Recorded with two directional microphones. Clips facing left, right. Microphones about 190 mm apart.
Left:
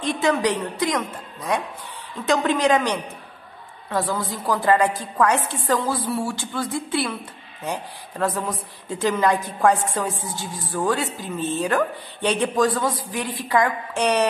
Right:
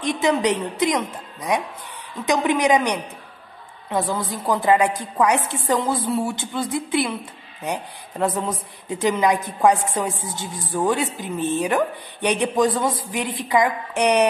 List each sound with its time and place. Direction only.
0.0 s a woman's voice: 15° right (ahead or behind)